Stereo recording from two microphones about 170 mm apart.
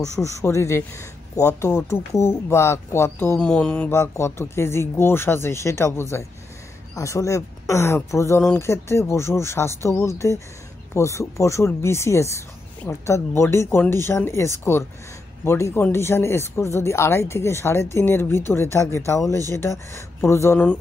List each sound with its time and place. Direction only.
0.2 s speech: 15° left (ahead or behind)